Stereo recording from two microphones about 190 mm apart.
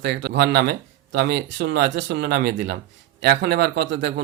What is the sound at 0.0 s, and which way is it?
Speech, 65° right (ahead or behind).